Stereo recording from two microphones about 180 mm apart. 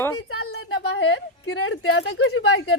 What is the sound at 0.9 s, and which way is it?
Speech, 75° left (ahead or behind).